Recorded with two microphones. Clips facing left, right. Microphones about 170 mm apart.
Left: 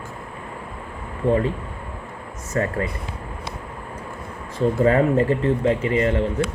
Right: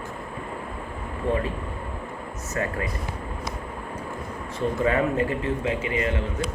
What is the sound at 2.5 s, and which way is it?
Speech, 30° left (ahead or behind).